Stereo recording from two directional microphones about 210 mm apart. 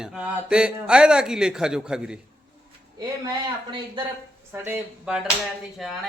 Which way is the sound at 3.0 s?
20° right (ahead or behind).